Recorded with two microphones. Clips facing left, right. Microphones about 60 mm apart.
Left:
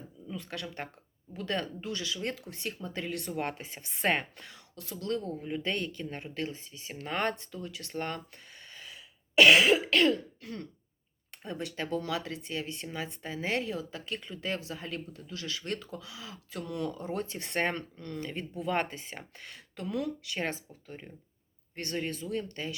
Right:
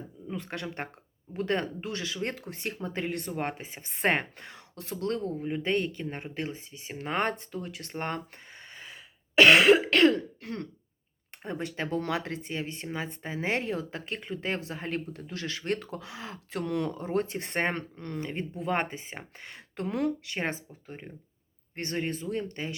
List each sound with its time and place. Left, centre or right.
0.3 s speech: right
5.3 s speech: right
11.4 s speech: right
11.9 s speech: right